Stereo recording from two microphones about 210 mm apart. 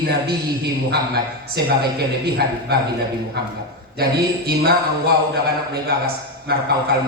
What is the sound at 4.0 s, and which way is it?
Speech, 45° right (ahead or behind).